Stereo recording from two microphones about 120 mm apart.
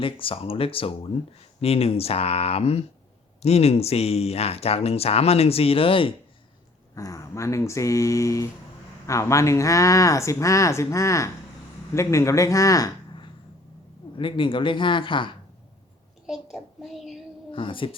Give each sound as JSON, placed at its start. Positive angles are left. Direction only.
{"t": 0.0, "sound": "speech", "side_deg": 50}
{"t": 6.9, "sound": "speech", "side_deg": 30}
{"t": 14.2, "sound": "speech", "side_deg": 45}
{"t": 16.2, "sound": "a child's voice", "side_deg": 0}
{"t": 17.5, "sound": "speech", "side_deg": 45}